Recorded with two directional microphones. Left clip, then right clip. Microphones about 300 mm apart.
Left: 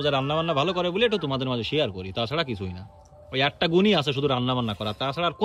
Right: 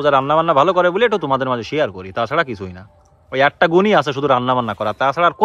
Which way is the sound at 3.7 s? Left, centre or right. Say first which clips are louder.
Right 8 dB; centre.